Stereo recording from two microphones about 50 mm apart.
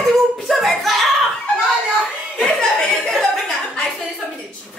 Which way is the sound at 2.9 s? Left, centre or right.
Centre.